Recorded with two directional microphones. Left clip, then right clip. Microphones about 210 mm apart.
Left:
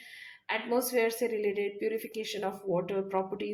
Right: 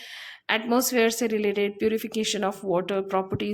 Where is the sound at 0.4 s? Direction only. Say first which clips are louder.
Right 6 dB; 35° right (ahead or behind).